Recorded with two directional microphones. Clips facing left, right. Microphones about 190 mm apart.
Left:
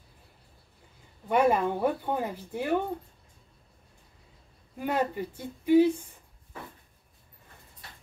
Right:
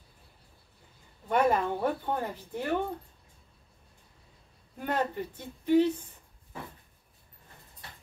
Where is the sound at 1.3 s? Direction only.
10° left (ahead or behind).